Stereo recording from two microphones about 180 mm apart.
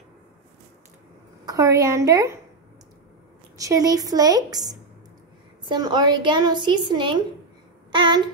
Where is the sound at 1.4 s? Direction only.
20° right (ahead or behind).